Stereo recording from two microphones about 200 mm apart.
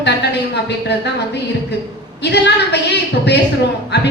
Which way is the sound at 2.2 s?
60° left (ahead or behind).